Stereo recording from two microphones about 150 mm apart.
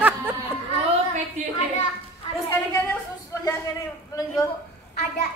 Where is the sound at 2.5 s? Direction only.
15° left (ahead or behind).